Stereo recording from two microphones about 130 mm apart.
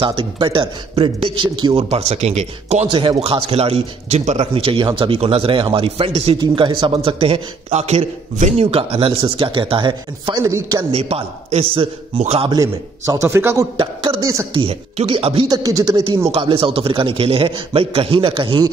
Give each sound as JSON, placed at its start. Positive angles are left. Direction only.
{"t": 0.0, "sound": "a man's voice", "side_deg": -40}
{"t": 1.9, "sound": "speech", "side_deg": -55}
{"t": 2.9, "sound": "a man's voice", "side_deg": -40}
{"t": 6.4, "sound": "a man's voice", "side_deg": -35}
{"t": 10.4, "sound": "a man's voice", "side_deg": -25}
{"t": 10.8, "sound": "a man's voice", "side_deg": -50}
{"t": 12.4, "sound": "a man's voice", "side_deg": -25}
{"t": 14.5, "sound": "a man's voice", "side_deg": -45}
{"t": 15.4, "sound": "a man's voice", "side_deg": -30}
{"t": 16.3, "sound": "a man's voice", "side_deg": -45}